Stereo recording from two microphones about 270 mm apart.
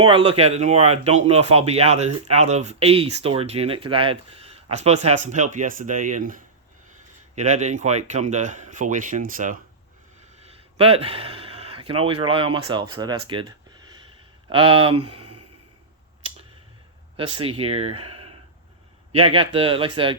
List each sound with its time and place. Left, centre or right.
0.0 s speech: centre
14.5 s speech: centre
17.2 s speech: centre